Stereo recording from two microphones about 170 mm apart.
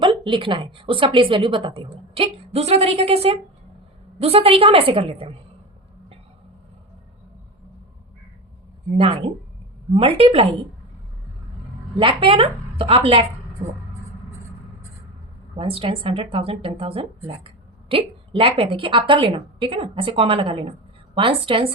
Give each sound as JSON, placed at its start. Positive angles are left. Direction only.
{"t": 0.0, "sound": "a woman's voice", "side_deg": -30}
{"t": 9.0, "sound": "a woman's voice", "side_deg": -30}
{"t": 11.9, "sound": "a woman's voice", "side_deg": -30}
{"t": 15.5, "sound": "a woman's voice", "side_deg": -35}